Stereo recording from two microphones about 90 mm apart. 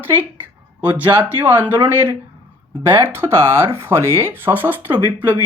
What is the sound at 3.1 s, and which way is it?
Speech, 30° right (ahead or behind).